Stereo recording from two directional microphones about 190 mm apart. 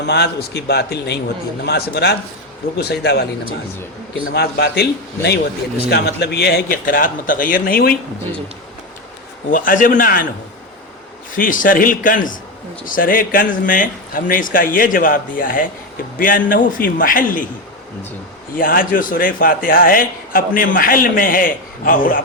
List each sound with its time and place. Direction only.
0.0 s a man's voice: 60° left (ahead or behind)
9.5 s speech: 45° left (ahead or behind)
11.3 s speech: 45° left (ahead or behind)
18.5 s speech: 50° left (ahead or behind)